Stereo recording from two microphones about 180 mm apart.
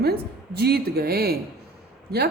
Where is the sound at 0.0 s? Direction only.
60° right (ahead or behind).